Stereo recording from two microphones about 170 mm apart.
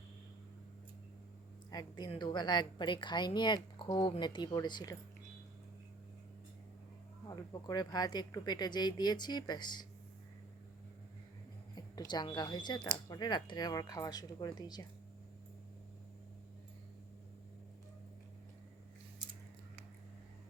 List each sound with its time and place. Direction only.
1.7 s a woman's voice: 25° left (ahead or behind)
7.3 s a woman's voice: 25° left (ahead or behind)
11.7 s a woman's voice: 25° left (ahead or behind)